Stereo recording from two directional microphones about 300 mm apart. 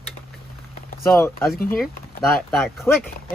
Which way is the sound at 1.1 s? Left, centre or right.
Centre.